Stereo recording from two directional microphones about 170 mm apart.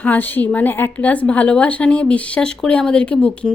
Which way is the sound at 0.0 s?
10° left (ahead or behind).